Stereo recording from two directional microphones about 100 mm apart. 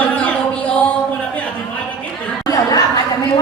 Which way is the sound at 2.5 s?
35° left (ahead or behind).